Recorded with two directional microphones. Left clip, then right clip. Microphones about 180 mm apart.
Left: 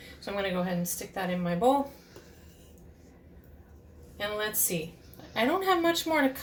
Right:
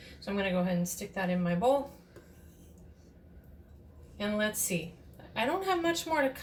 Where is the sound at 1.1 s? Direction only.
45° left (ahead or behind).